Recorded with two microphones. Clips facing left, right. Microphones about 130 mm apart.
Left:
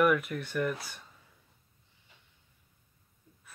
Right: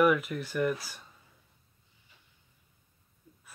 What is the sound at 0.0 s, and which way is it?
Speech, centre (ahead or behind).